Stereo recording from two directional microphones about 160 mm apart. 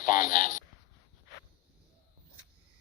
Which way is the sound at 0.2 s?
55° left (ahead or behind).